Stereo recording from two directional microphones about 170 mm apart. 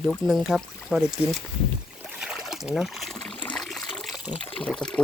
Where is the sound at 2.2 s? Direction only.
5° right (ahead or behind).